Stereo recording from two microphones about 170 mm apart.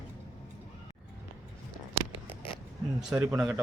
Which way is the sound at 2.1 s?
30° left (ahead or behind).